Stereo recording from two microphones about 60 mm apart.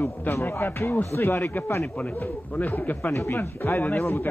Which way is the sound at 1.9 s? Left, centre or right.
Left.